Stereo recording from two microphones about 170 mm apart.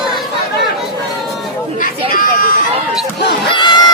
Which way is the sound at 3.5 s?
25° left (ahead or behind).